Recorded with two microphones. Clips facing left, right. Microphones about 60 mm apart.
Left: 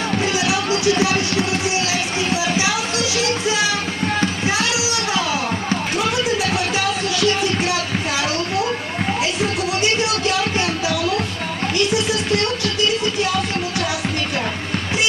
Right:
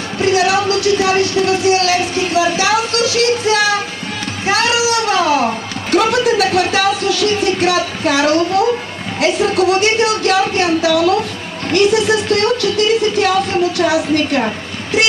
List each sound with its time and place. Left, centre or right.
0.2 s speech: right
4.5 s a sound: right
7.6 s speech: right
13.7 s speech: right